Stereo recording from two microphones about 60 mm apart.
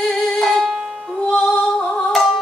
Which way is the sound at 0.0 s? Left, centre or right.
Centre.